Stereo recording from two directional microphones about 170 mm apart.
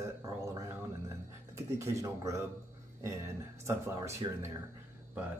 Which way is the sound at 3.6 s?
15° right (ahead or behind).